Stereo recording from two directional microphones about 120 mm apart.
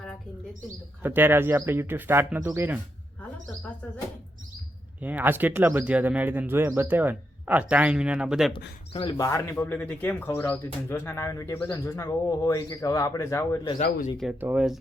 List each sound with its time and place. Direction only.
1.0 s speech: 15° right (ahead or behind)
4.9 s speech: 15° right (ahead or behind)
8.5 s speech: 50° left (ahead or behind)
9.1 s speech: 30° left (ahead or behind)
14.4 s speech: 5° right (ahead or behind)